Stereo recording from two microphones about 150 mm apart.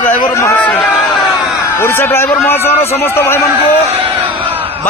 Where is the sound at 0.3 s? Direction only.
20° left (ahead or behind).